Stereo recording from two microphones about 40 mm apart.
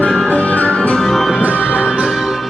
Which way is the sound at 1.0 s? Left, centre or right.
Centre.